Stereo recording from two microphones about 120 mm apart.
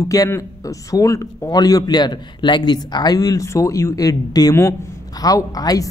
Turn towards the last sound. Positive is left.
turn(degrees=30)  # may be behind; listen again after turning